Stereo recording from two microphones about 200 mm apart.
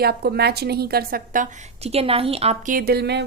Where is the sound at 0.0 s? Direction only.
50° right (ahead or behind).